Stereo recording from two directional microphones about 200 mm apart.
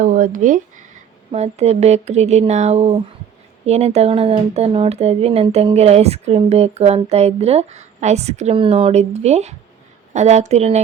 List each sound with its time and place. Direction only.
0.0 s speech: 40° right (ahead or behind)